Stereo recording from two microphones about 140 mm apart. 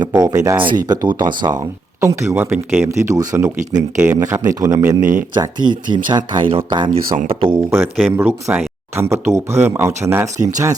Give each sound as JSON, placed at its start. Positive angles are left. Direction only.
{"t": 0.0, "sound": "speech", "side_deg": -30}
{"t": 2.0, "sound": "speech", "side_deg": -20}
{"t": 3.9, "sound": "speech", "side_deg": -10}
{"t": 4.2, "sound": "speech", "side_deg": -25}
{"t": 4.9, "sound": "speech", "side_deg": -65}
{"t": 5.3, "sound": "speech", "side_deg": -30}
{"t": 8.1, "sound": "speech", "side_deg": -15}
{"t": 10.3, "sound": "speech", "side_deg": -60}